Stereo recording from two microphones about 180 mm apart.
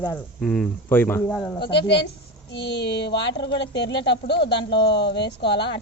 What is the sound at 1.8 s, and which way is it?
Speech, 65° left (ahead or behind).